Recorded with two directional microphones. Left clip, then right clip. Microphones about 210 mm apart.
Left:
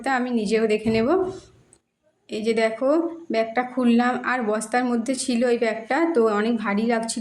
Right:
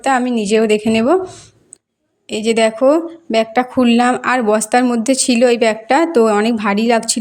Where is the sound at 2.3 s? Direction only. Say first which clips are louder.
Right 8 dB; 40° right (ahead or behind).